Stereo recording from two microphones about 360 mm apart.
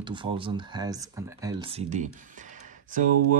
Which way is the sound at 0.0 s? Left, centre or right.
Centre.